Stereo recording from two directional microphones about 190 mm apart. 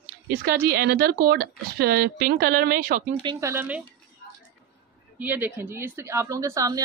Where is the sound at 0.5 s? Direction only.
55° right (ahead or behind).